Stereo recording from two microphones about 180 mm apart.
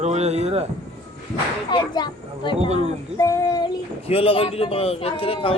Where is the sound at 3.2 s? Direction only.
20° left (ahead or behind).